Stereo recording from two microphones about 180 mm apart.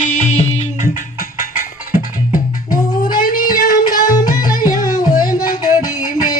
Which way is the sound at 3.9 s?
50° left (ahead or behind).